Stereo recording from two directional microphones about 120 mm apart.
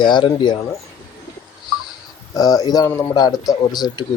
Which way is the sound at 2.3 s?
30° left (ahead or behind).